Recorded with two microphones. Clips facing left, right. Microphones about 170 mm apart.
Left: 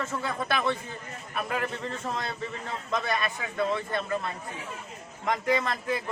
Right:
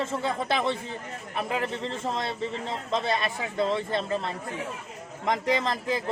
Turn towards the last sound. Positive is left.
turn(degrees=-30)  # may be behind; listen again after turning